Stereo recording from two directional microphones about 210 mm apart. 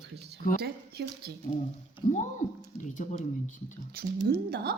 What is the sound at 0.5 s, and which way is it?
Speech, 50° right (ahead or behind).